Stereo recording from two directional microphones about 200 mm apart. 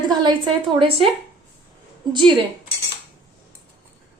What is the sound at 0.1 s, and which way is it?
Speech, 20° right (ahead or behind).